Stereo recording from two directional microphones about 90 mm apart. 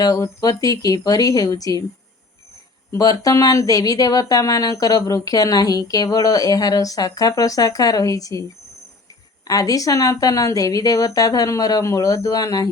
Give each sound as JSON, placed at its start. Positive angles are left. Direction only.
{"t": 0.0, "sound": "speech", "side_deg": 45}
{"t": 2.9, "sound": "speech", "side_deg": 40}
{"t": 9.5, "sound": "speech", "side_deg": 40}